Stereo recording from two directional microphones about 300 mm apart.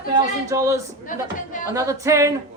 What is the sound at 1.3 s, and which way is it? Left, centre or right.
Speech, left.